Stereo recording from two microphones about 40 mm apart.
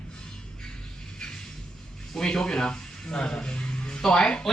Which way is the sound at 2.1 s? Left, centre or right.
Centre.